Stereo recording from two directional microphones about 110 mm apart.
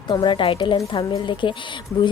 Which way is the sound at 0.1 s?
45° left (ahead or behind).